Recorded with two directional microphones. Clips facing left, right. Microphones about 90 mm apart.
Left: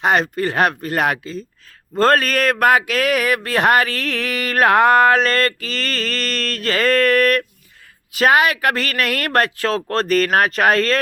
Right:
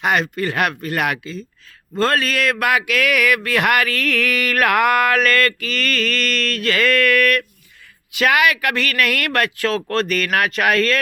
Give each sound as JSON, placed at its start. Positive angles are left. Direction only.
{"t": 0.0, "sound": "speech", "side_deg": 35}